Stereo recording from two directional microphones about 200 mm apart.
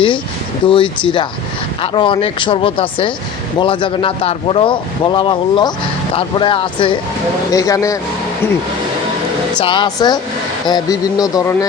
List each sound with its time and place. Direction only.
0.6 s speech: 25° left (ahead or behind)
9.6 s speech: 25° left (ahead or behind)